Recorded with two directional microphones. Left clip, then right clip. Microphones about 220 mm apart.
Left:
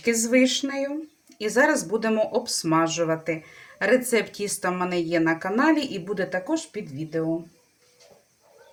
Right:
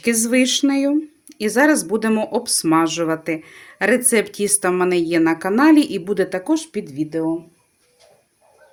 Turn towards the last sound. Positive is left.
turn(degrees=-50)  # may be behind; listen again after turning